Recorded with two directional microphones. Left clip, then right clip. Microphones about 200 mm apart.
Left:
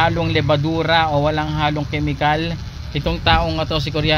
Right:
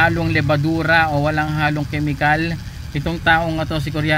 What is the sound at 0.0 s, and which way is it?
Speech, 5° left (ahead or behind).